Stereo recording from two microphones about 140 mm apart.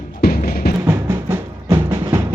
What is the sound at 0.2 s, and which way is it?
Music, 90° left.